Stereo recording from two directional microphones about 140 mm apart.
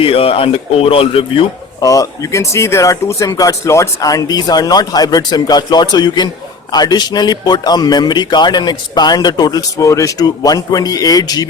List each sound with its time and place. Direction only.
0.0 s speech: 40° left (ahead or behind)
1.8 s a man's voice: 25° left (ahead or behind)